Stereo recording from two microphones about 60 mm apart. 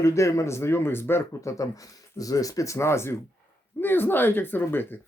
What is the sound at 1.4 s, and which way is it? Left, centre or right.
Speech, left.